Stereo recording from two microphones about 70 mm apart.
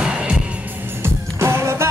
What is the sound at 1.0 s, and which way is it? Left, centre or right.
Music, right.